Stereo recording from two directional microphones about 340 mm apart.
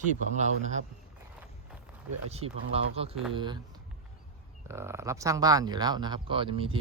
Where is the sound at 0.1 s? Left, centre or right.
Right.